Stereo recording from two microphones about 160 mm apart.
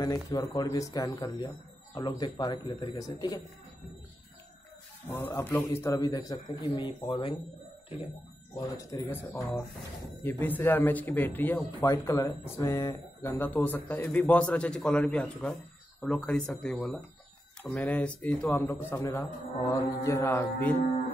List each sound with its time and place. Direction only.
0.0 s a man's voice: 20° left (ahead or behind)
5.0 s a man's voice: 15° left (ahead or behind); by 7.3 s 30° left (ahead or behind)
8.5 s a man's voice: 20° left (ahead or behind)